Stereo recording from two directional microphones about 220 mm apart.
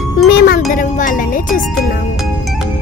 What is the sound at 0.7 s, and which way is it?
Speech, 35° left (ahead or behind).